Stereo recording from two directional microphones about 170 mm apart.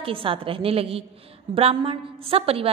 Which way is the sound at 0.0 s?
30° right (ahead or behind).